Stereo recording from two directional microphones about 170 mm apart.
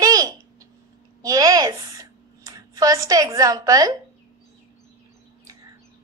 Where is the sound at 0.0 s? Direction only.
20° right (ahead or behind).